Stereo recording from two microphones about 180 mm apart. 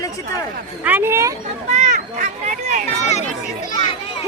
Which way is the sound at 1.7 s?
45° right (ahead or behind).